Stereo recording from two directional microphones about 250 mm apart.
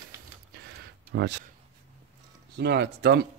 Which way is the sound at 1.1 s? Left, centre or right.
Right.